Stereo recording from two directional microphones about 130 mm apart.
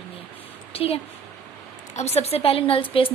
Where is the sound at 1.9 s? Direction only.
60° left (ahead or behind); by 3.1 s 45° left (ahead or behind).